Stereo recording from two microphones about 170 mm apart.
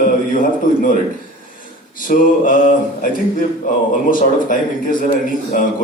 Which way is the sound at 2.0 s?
55° left (ahead or behind).